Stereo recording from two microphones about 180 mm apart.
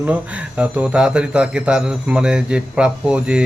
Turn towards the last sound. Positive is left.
turn(degrees=-5)  # may be behind; listen again after turning